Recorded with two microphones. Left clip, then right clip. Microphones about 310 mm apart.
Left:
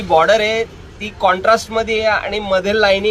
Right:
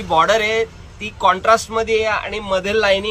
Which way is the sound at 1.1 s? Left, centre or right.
Left.